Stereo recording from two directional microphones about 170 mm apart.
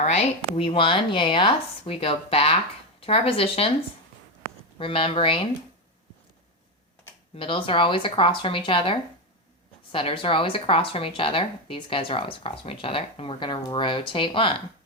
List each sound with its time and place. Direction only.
0.0 s speech: 40° left (ahead or behind)
4.8 s speech: 30° left (ahead or behind)
7.3 s speech: 30° left (ahead or behind)